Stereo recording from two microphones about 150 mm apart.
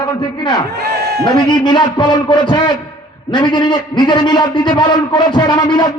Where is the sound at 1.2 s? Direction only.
30° left (ahead or behind).